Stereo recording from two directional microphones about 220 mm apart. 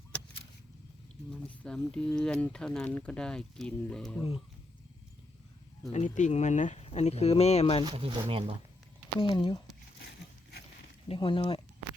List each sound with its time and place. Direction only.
1.5 s speech: 5° left (ahead or behind)
5.9 s speech: 30° left (ahead or behind)
7.9 s speech: 25° right (ahead or behind)
9.2 s speech: 25° left (ahead or behind)
10.0 s a sound: 50° left (ahead or behind)
11.1 s speech: 25° left (ahead or behind)